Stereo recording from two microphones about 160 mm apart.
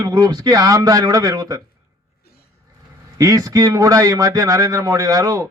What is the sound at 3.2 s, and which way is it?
A man's voice, 20° right (ahead or behind).